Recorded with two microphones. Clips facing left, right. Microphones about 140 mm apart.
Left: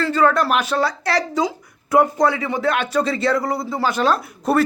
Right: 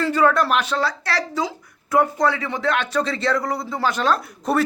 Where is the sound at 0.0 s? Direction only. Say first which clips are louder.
Left 1 dB; 10° right (ahead or behind).